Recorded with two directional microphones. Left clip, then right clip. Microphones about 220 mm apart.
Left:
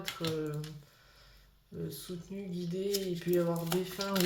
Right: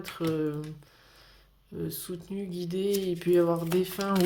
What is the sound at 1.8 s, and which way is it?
Speech, 45° right (ahead or behind).